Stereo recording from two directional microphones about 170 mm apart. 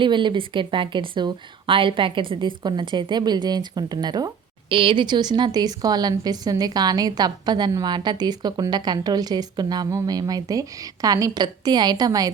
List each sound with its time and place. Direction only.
0.0 s a woman's voice: 30° right (ahead or behind)